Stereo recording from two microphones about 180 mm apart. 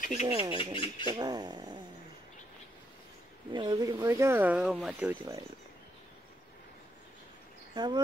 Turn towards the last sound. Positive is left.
turn(degrees=-25)  # may be behind; listen again after turning